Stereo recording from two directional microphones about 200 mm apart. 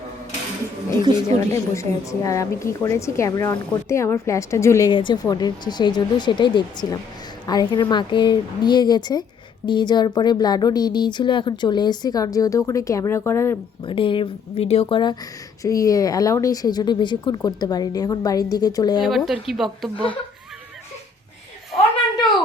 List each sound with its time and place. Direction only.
1.1 s speech: 20° right (ahead or behind)
1.7 s a woman's voice: 15° left (ahead or behind)
13.8 s speech: 25° left (ahead or behind)
19.0 s speech: centre (ahead or behind)